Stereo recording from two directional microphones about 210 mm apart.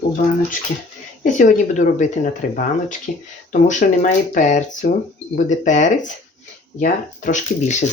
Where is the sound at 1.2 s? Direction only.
35° left (ahead or behind).